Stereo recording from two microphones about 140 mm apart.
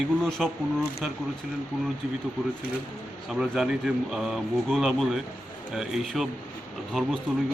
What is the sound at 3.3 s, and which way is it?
Speech, 5° right (ahead or behind).